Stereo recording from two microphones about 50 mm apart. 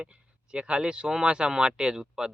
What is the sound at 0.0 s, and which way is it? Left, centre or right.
Speech, right.